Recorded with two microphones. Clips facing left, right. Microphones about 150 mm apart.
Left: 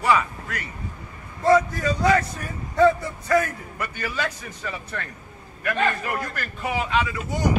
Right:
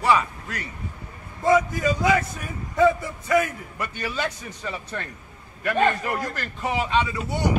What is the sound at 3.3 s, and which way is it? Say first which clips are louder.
A man's voice: even; 20° right (ahead or behind).